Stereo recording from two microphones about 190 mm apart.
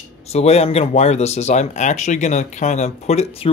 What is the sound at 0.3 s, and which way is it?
Speech, 35° left (ahead or behind).